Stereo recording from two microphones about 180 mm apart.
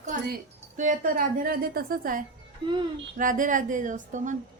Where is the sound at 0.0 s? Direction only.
50° right (ahead or behind).